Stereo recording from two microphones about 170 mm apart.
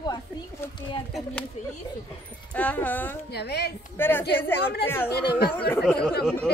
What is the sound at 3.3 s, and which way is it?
Speech, 75° left (ahead or behind).